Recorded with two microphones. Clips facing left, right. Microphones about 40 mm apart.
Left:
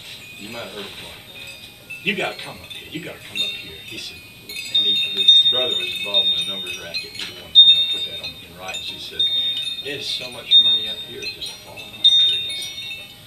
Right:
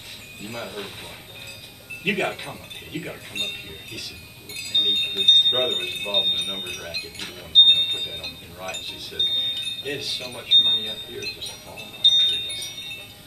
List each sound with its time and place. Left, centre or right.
0.4 s speech: left
2.0 s speech: left
5.9 s speech: left
12.0 s music: left
12.4 s wind chime: left